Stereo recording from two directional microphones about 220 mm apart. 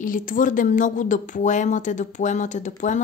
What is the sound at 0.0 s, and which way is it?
A woman's voice, 35° left (ahead or behind).